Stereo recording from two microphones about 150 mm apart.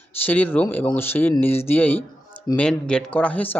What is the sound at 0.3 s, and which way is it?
A man's voice, 10° left (ahead or behind).